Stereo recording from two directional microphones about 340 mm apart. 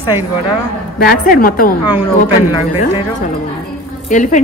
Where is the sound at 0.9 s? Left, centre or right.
Left.